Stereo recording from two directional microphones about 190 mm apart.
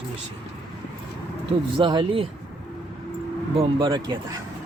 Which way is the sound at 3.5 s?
20° right (ahead or behind).